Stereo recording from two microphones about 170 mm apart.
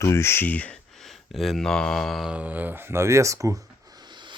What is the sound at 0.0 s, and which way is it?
Speech, 15° left (ahead or behind).